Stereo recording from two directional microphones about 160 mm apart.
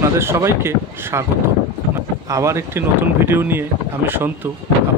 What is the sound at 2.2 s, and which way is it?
Speech, 20° right (ahead or behind).